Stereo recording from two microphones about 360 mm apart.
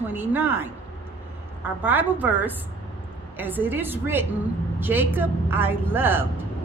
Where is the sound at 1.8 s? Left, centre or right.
Centre.